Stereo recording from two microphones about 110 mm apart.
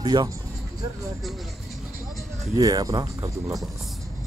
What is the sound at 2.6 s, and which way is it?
Speech, 35° right (ahead or behind).